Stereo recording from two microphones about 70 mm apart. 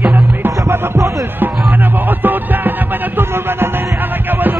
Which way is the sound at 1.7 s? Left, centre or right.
Right.